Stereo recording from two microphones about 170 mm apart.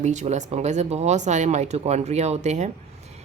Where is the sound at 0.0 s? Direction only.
45° right (ahead or behind).